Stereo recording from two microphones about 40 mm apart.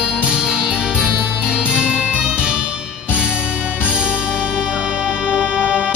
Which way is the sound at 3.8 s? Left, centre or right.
Right.